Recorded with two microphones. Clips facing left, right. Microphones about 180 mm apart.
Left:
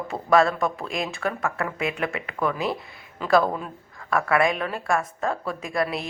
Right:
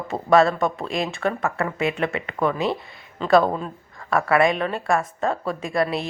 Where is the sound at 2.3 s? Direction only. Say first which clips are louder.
Right 3 dB; 25° right (ahead or behind).